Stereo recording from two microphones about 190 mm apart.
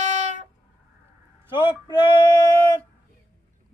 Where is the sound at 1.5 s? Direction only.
25° left (ahead or behind).